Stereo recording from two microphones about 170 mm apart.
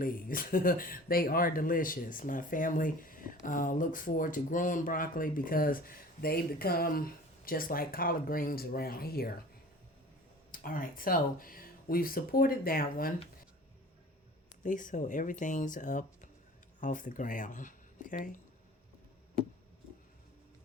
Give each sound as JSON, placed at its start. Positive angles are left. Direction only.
{"t": 0.0, "sound": "speech", "side_deg": 55}
{"t": 10.5, "sound": "speech", "side_deg": 55}
{"t": 14.6, "sound": "speech", "side_deg": 50}